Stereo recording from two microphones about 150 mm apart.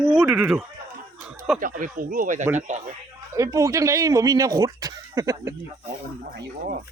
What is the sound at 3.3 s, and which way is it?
Speech, 20° right (ahead or behind).